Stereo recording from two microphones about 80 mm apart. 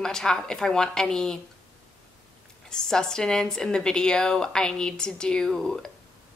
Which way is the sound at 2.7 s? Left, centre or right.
Centre.